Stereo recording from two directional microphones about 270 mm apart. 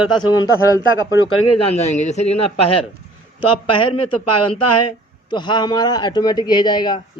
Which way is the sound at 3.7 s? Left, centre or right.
Centre.